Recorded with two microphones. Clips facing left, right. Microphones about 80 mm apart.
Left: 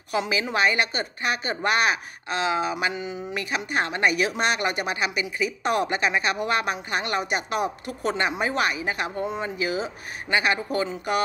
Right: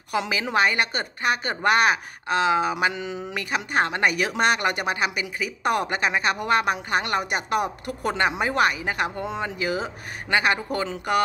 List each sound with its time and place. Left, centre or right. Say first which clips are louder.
0.1 s speech: right 1 dB; right
3.3 s speech: right 3 dB; right